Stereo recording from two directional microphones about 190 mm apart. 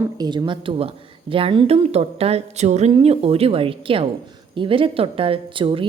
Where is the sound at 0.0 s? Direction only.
20° right (ahead or behind).